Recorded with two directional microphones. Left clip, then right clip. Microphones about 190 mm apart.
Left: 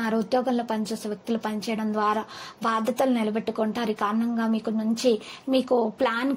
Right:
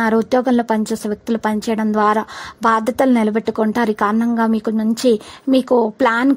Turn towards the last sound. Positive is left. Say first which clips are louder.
# right 9 dB
turn(degrees=-40)  # may be behind; listen again after turning